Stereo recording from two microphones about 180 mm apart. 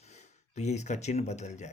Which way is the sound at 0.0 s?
40° left (ahead or behind).